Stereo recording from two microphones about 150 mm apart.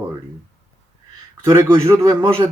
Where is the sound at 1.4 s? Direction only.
15° right (ahead or behind).